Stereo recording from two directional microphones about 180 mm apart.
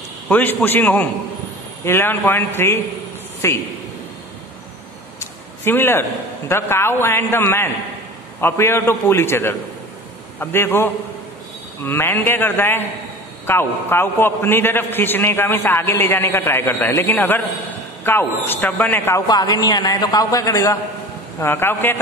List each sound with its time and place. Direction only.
0.3 s a man's voice: 10° left (ahead or behind)
5.6 s a man's voice: 10° left (ahead or behind)